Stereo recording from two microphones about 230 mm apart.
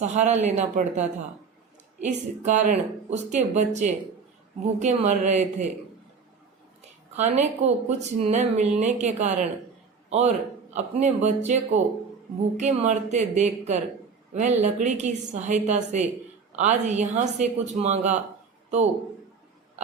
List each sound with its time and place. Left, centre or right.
0.0 s speech: right
7.2 s speech: right